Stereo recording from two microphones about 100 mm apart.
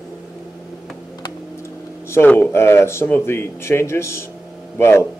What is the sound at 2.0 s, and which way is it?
Speech, 25° left (ahead or behind).